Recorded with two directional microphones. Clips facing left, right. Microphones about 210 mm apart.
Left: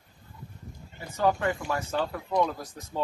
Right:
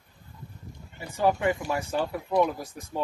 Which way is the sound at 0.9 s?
15° right (ahead or behind).